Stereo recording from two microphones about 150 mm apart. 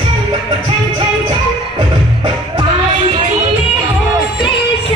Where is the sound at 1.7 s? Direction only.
30° right (ahead or behind).